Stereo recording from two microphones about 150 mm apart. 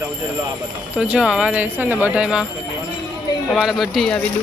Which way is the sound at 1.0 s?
5° right (ahead or behind).